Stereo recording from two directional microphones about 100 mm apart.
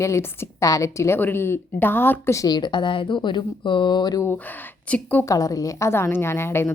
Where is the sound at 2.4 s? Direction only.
40° left (ahead or behind).